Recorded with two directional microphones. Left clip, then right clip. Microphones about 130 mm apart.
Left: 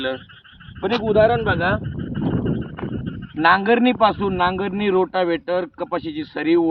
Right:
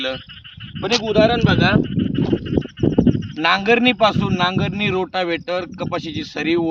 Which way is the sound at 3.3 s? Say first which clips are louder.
Left 1 dB; 35° right (ahead or behind).